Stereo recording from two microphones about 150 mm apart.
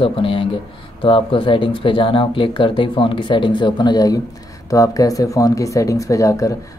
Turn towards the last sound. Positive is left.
turn(degrees=20)  # may be behind; listen again after turning